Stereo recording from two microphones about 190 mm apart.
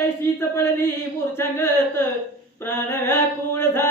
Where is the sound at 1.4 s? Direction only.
10° left (ahead or behind).